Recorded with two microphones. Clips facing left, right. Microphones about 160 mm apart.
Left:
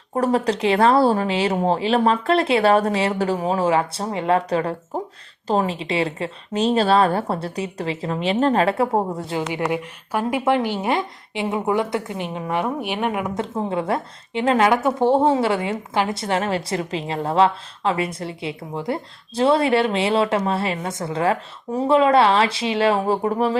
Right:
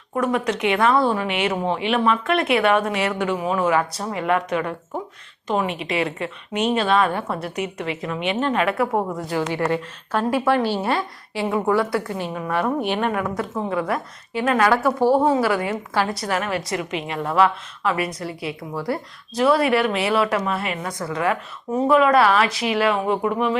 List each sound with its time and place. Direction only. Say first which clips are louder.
0.1 s speech: left 2 dB; 30° left (ahead or behind)
9.5 s a woman's voice: right 1 dB; 15° left (ahead or behind); by 23.6 s 35° left (ahead or behind)